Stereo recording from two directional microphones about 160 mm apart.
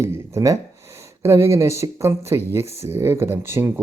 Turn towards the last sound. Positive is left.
turn(degrees=-15)  # may be behind; listen again after turning